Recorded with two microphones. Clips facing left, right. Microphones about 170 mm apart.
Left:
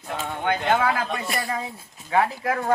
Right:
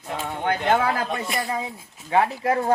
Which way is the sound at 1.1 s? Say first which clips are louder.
Right 1 dB; 20° right (ahead or behind).